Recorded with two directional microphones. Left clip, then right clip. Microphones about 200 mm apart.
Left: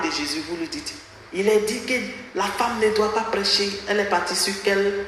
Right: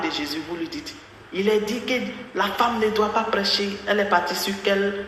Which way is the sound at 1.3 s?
20° left (ahead or behind).